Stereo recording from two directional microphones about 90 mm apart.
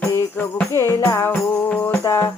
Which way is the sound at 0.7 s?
30° left (ahead or behind).